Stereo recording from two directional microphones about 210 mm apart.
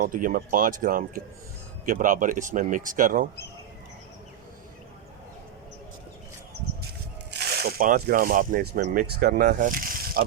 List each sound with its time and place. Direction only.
0.0 s a man's voice: 40° right (ahead or behind)
7.3 s speech: 50° right (ahead or behind)